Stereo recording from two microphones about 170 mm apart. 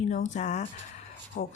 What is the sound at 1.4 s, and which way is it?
Speech, 55° left (ahead or behind).